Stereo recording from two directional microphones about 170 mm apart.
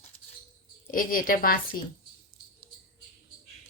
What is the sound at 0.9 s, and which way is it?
Speech, 55° left (ahead or behind).